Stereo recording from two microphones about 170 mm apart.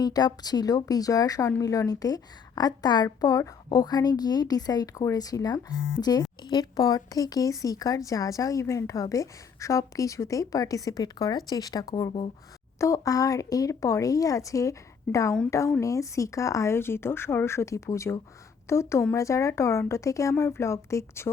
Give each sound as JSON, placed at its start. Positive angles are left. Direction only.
{"t": 0.0, "sound": "speech", "side_deg": 25}